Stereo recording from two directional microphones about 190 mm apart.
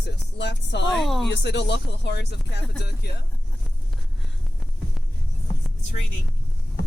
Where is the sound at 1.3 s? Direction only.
65° left (ahead or behind).